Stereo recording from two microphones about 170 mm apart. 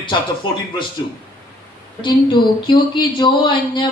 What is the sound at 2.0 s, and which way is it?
A woman's voice, 30° left (ahead or behind).